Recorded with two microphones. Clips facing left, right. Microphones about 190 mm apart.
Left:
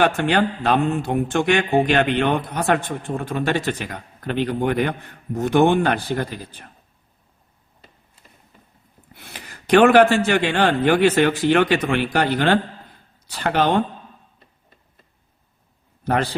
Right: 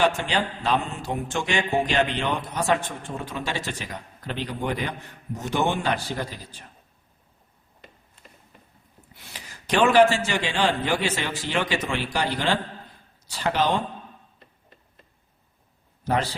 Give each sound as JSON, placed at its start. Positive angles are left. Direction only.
{"t": 0.0, "sound": "speech", "side_deg": 60}
{"t": 9.1, "sound": "speech", "side_deg": 60}
{"t": 16.0, "sound": "speech", "side_deg": 55}